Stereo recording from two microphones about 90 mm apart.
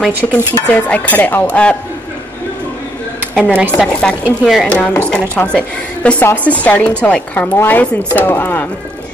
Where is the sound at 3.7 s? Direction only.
10° left (ahead or behind).